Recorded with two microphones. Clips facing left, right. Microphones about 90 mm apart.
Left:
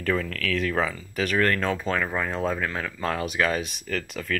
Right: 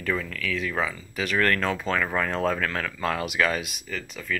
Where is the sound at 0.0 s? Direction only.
50° left (ahead or behind).